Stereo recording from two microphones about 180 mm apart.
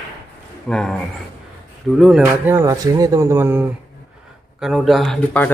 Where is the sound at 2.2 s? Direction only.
15° right (ahead or behind).